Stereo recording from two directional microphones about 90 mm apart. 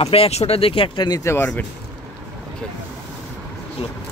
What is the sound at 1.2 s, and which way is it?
Speech, 25° left (ahead or behind).